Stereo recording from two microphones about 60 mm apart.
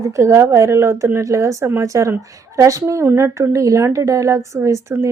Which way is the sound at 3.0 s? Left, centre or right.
Right.